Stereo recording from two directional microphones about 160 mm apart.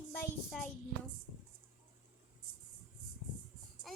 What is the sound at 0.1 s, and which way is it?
Child singing, 5° left (ahead or behind).